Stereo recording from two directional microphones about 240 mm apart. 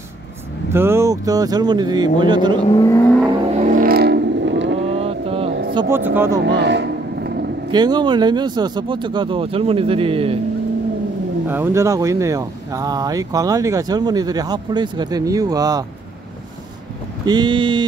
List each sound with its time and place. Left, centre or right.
0.7 s speech: centre
2.7 s vehicle: centre
3.5 s vehicle: right
4.8 s vehicle: right
5.8 s speech: centre
6.4 s vehicle: right
7.7 s speech: centre
11.4 s speech: centre
17.3 s speech: centre